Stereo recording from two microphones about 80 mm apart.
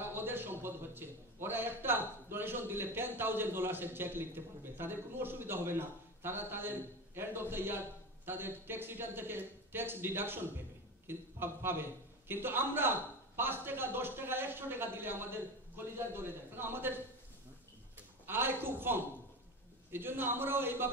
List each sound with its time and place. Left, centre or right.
0.0 s a man's voice: right
18.2 s a man's voice: right